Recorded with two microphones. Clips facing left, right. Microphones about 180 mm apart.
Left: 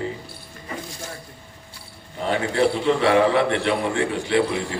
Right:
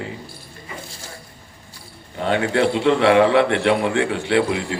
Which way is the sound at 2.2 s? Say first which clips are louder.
Right 2 dB; 65° right (ahead or behind).